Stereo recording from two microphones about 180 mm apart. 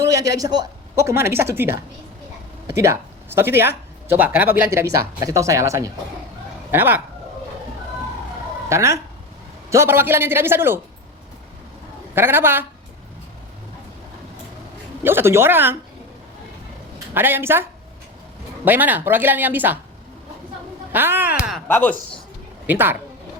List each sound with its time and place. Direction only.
0.1 s speech: 20° right (ahead or behind)
2.7 s speech: 15° right (ahead or behind)
8.7 s speech: 15° right (ahead or behind)
12.1 s speech: 10° right (ahead or behind)
15.0 s speech: 10° right (ahead or behind)
17.2 s speech: 10° right (ahead or behind)
20.9 s speech: 10° right (ahead or behind)
21.7 s speech: 10° left (ahead or behind)
22.6 s speech: 10° right (ahead or behind)